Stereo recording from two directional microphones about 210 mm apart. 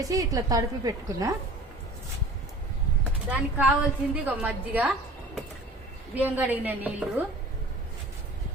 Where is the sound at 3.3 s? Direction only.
5° right (ahead or behind).